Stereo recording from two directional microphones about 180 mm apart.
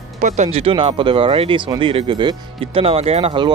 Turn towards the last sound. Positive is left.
turn(degrees=-30)  # may be behind; listen again after turning